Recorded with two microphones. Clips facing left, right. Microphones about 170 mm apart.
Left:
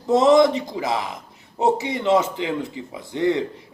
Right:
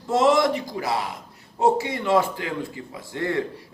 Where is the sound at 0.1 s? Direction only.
20° left (ahead or behind).